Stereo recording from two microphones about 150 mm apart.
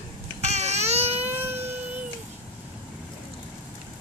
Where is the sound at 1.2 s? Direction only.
15° right (ahead or behind).